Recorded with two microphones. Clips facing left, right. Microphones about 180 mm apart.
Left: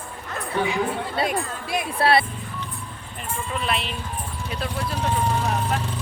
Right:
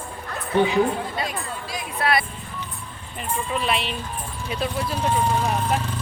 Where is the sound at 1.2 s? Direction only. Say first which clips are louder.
Left 4 dB; 60° left (ahead or behind).